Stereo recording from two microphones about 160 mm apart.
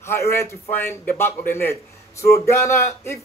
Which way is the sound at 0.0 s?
15° left (ahead or behind).